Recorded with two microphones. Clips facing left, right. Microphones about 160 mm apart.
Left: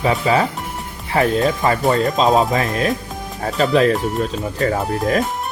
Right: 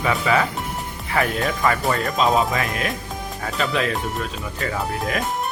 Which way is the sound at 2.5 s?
35° left (ahead or behind).